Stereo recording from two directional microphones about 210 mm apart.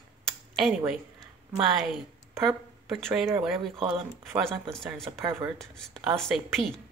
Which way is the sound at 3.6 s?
25° right (ahead or behind).